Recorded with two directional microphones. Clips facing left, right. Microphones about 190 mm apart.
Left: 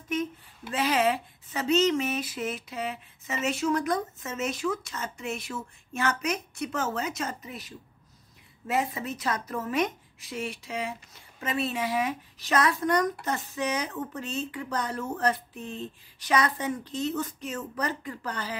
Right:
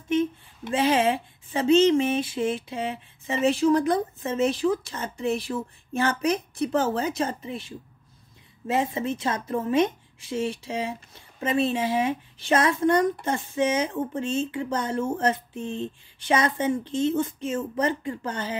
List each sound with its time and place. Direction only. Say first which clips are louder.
0.1 s speech: right 7 dB; 25° right (ahead or behind)